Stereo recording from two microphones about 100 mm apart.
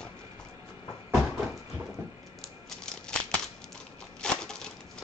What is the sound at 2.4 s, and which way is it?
Typewriter, 5° left (ahead or behind).